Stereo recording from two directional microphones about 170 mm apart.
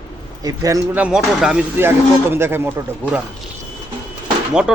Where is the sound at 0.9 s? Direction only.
5° right (ahead or behind).